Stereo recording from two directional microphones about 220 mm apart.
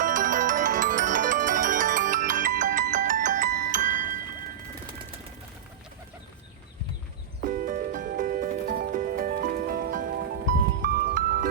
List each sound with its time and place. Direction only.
0.0 s music: 35° right (ahead or behind)
7.4 s music: 40° right (ahead or behind)